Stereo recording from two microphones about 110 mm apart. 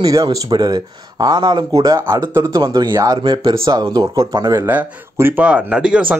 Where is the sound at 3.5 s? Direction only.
35° right (ahead or behind).